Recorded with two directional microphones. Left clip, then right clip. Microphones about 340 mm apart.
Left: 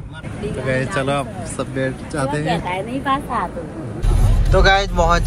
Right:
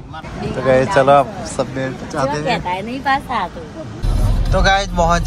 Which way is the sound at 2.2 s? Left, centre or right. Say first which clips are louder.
Right 3 dB; right.